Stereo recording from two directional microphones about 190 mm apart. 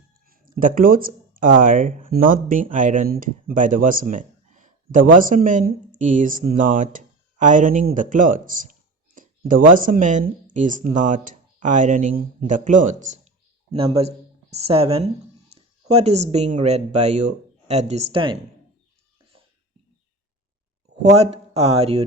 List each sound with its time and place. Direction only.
0.3 s speech: 45° right (ahead or behind)
9.1 s a sound: 45° right (ahead or behind)
9.7 s speech: 45° right (ahead or behind); by 18.3 s 25° right (ahead or behind)
21.0 s speech: 35° right (ahead or behind)